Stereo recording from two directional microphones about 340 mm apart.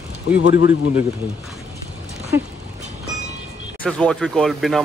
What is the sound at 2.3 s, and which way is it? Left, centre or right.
Dog, centre.